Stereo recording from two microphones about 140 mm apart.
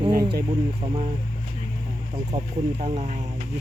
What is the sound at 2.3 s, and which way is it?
Speech, 50° right (ahead or behind).